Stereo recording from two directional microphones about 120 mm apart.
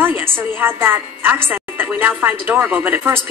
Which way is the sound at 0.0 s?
15° right (ahead or behind).